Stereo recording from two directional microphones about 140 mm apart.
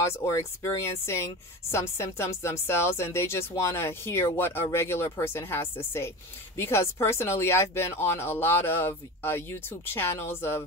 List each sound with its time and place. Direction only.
0.0 s speech: 20° left (ahead or behind)